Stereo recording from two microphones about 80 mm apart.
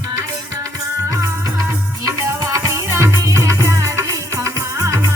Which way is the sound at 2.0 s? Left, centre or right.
Right.